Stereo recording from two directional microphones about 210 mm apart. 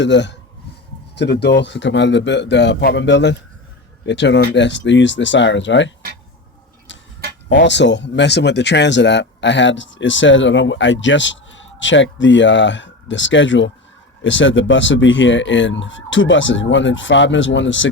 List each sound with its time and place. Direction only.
0.0 s speech: 55° left (ahead or behind)
7.5 s speech: 60° left (ahead or behind)